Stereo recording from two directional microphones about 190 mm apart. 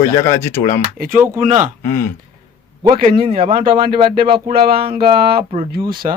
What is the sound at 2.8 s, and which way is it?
Speech, 50° right (ahead or behind).